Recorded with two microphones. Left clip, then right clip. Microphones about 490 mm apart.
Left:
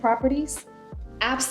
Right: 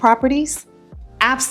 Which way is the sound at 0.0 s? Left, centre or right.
Right.